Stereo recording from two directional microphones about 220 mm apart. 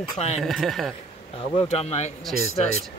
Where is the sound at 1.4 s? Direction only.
30° left (ahead or behind).